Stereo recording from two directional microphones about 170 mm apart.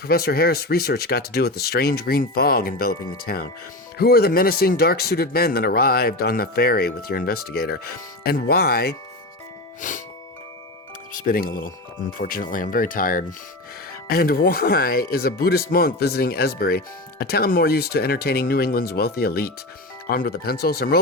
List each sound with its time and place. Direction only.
0.0 s speech: 65° left (ahead or behind)
9.8 s music: 50° left (ahead or behind)
11.1 s speech: 55° left (ahead or behind)